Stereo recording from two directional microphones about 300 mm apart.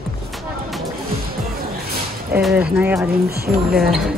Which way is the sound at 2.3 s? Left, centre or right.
Centre.